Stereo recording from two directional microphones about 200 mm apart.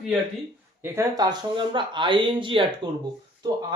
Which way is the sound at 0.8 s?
15° right (ahead or behind).